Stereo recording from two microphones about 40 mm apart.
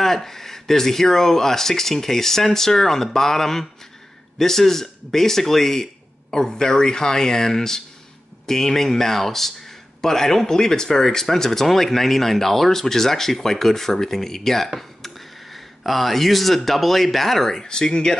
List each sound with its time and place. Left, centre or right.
0.0 s speech: centre